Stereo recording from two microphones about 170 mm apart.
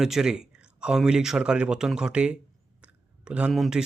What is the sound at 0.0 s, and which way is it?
Speech, 5° right (ahead or behind).